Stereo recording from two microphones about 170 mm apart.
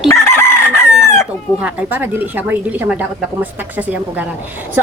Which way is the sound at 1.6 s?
10° right (ahead or behind).